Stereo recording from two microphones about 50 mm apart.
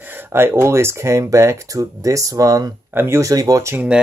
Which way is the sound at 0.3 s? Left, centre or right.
Right.